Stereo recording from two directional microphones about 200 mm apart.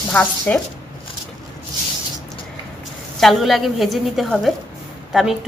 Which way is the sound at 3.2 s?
Centre (ahead or behind).